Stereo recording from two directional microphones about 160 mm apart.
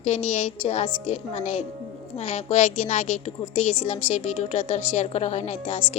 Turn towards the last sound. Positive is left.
turn(degrees=45)  # may be behind; listen again after turning